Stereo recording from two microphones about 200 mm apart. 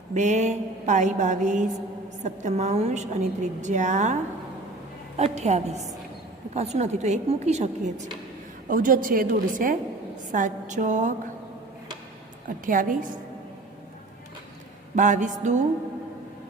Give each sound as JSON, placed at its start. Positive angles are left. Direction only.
{"t": 0.1, "sound": "a woman's voice", "side_deg": -35}
{"t": 12.6, "sound": "a woman's voice", "side_deg": -40}
{"t": 14.9, "sound": "a woman's voice", "side_deg": -40}